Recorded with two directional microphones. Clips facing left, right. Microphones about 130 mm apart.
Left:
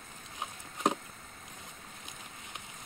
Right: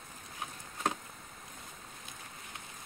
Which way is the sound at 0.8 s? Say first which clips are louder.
Left 4 dB; 15° left (ahead or behind).